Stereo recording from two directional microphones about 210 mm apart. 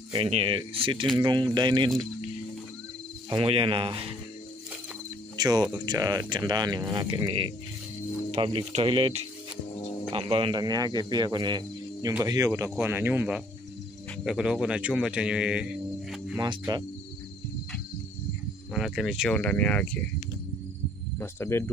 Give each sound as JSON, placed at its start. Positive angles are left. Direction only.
{"t": 0.1, "sound": "speech", "side_deg": -25}
{"t": 3.3, "sound": "speech", "side_deg": -25}
{"t": 5.4, "sound": "speech", "side_deg": -20}
{"t": 16.3, "sound": "speech", "side_deg": -15}
{"t": 18.7, "sound": "speech", "side_deg": 0}
{"t": 21.2, "sound": "cricket", "side_deg": 10}